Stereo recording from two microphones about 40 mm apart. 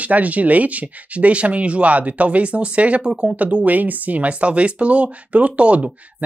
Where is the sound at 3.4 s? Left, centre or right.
Right.